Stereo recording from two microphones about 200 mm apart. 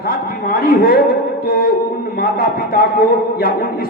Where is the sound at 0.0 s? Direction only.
50° left (ahead or behind).